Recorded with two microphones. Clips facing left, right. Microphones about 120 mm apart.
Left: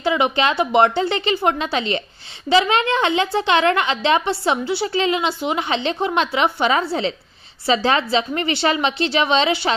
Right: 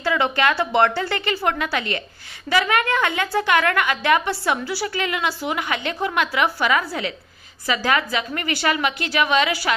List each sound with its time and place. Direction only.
0.0 s a woman's voice: 20° left (ahead or behind)